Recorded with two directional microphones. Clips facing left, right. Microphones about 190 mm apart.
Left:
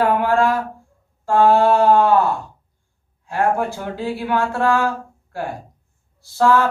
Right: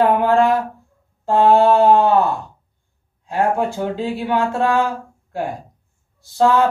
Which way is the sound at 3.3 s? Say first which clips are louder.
Right 1 dB; 20° right (ahead or behind).